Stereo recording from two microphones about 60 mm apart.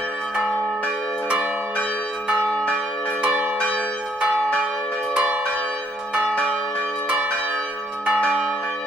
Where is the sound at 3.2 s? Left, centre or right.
Right.